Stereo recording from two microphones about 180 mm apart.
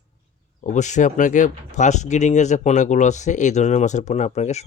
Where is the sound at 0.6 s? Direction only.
40° left (ahead or behind).